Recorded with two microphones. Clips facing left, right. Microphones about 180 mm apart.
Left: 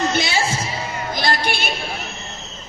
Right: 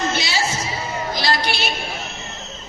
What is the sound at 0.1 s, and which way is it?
Music, 55° left (ahead or behind).